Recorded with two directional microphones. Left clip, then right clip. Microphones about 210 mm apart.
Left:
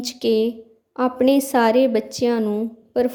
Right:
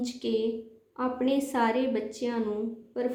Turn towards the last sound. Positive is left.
turn(degrees=50)  # may be behind; listen again after turning